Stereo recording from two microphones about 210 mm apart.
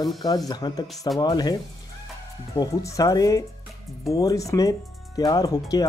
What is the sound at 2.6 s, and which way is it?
Speech, 15° left (ahead or behind).